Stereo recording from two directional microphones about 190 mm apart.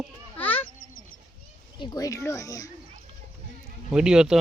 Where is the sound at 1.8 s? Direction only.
20° left (ahead or behind).